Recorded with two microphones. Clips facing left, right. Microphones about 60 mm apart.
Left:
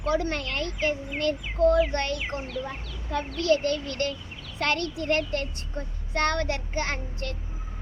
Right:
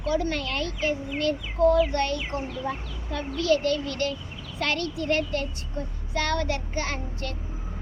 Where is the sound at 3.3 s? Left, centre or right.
Left.